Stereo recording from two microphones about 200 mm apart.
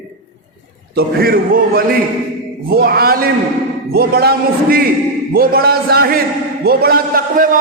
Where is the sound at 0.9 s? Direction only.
50° right (ahead or behind).